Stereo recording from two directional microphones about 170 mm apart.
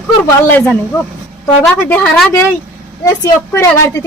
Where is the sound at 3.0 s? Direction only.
20° left (ahead or behind).